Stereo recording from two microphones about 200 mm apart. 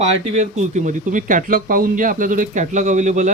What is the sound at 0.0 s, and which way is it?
Speech, 35° right (ahead or behind).